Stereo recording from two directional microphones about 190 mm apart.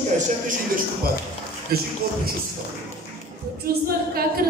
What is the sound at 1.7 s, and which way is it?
Music, 55° right (ahead or behind).